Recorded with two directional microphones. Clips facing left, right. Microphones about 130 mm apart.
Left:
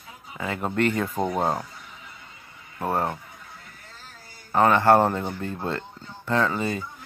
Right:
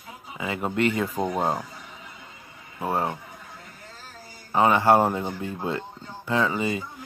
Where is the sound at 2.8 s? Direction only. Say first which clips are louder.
Left 1 dB; 10° right (ahead or behind).